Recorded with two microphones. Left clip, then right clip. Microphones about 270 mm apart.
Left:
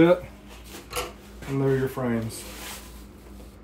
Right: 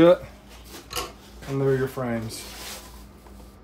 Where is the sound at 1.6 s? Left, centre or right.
Centre.